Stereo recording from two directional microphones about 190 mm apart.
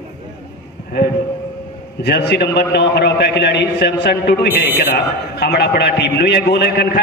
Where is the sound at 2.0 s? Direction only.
60° left (ahead or behind).